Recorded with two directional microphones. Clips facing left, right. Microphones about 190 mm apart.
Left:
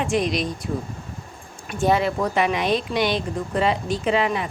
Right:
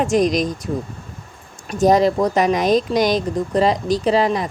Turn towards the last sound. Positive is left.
turn(degrees=-35)  # may be behind; listen again after turning